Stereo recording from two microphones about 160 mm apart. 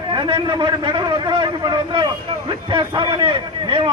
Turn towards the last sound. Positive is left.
turn(degrees=-30)  # may be behind; listen again after turning